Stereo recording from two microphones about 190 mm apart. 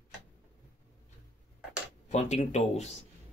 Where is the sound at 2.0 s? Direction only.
35° left (ahead or behind).